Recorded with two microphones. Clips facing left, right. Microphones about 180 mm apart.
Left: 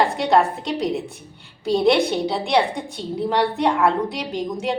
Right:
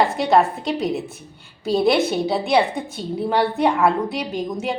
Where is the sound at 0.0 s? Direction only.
Centre (ahead or behind).